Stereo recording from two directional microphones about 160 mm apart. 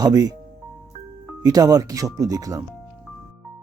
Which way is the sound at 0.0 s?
25° right (ahead or behind).